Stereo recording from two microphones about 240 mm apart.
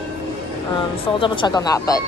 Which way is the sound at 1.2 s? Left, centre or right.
Centre.